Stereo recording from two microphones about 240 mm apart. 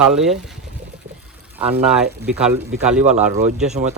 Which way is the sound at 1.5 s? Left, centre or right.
Centre.